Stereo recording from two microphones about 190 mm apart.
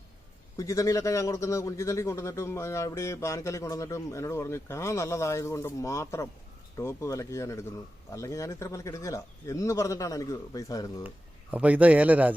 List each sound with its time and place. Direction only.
0.5 s a man's voice: 15° left (ahead or behind)
11.5 s speech: 5° right (ahead or behind)